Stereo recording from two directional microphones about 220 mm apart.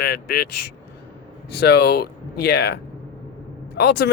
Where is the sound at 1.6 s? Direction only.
45° left (ahead or behind).